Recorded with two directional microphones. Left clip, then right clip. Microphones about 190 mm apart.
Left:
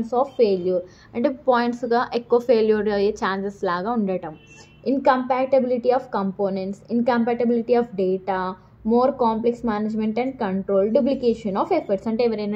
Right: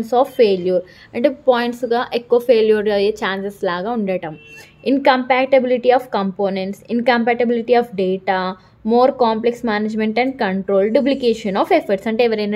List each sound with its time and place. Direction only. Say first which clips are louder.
0.0 s a woman's voice: right 6 dB; 25° right (ahead or behind)